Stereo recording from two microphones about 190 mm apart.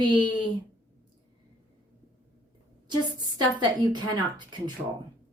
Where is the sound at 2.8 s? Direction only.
25° right (ahead or behind).